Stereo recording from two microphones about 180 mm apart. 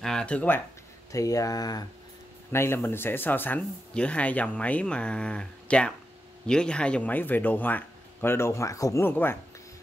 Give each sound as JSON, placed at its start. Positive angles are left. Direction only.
{"t": 0.0, "sound": "speech", "side_deg": 5}
{"t": 1.1, "sound": "speech", "side_deg": 20}